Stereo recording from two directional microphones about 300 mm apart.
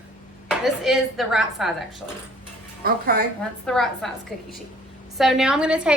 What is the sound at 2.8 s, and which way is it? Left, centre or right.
Speech, right.